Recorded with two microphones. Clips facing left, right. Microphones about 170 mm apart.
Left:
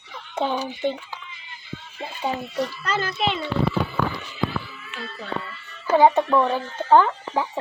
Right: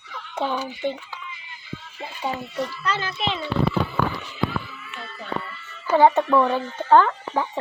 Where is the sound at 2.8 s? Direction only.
45° left (ahead or behind).